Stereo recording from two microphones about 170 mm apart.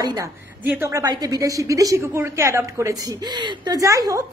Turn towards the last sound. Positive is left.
turn(degrees=-20)  # may be behind; listen again after turning